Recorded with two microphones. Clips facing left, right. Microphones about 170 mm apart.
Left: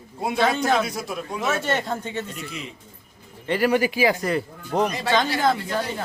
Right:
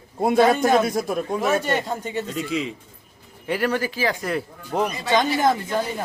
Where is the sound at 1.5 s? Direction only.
15° right (ahead or behind).